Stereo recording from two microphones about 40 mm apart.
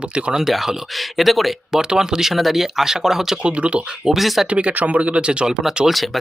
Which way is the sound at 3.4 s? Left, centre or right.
Right.